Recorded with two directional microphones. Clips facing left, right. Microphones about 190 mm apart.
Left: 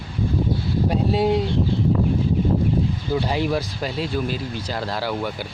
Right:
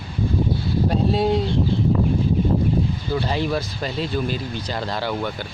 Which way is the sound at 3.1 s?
10° left (ahead or behind).